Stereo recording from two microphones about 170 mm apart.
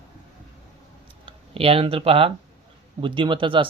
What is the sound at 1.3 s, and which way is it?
Speech, 35° right (ahead or behind).